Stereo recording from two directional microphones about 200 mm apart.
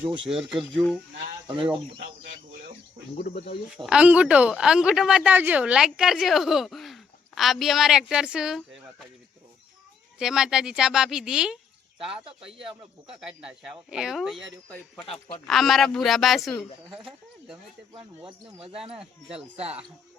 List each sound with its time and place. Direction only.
0.3 s a woman's voice: centre (ahead or behind)
1.5 s speech: 25° right (ahead or behind)
3.2 s speech: 45° left (ahead or behind)
3.8 s a woman's voice: 5° right (ahead or behind)
10.2 s a woman's voice: 5° right (ahead or behind)
12.2 s speech: 30° right (ahead or behind)
13.1 s a woman's voice: 5° right (ahead or behind)
15.0 s speech: 30° left (ahead or behind)
15.4 s a woman's voice: centre (ahead or behind)
17.9 s speech: 25° right (ahead or behind)
18.9 s a woman's voice: 5° right (ahead or behind)